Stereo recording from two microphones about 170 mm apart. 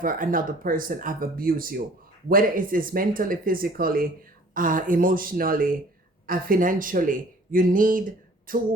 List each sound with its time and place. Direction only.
0.0 s speech: 55° right (ahead or behind)